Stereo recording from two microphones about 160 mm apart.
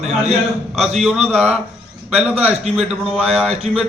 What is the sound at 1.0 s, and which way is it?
Speech, 5° right (ahead or behind).